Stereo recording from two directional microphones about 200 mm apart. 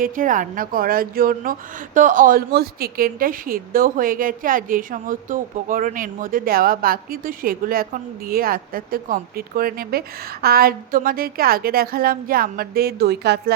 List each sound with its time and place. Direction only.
0.0 s a woman's voice: 40° right (ahead or behind)